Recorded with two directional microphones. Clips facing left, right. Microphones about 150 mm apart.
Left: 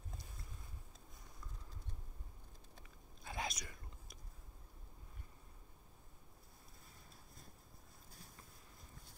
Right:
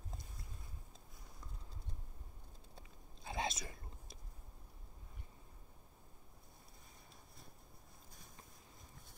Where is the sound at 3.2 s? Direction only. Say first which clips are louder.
Right 3 dB; 25° right (ahead or behind).